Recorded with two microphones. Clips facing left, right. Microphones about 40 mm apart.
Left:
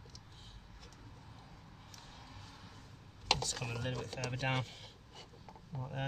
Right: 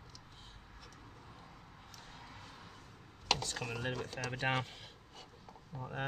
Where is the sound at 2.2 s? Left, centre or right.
Right.